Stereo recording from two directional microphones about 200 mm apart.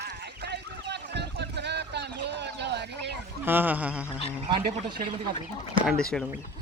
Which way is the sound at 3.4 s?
10° right (ahead or behind).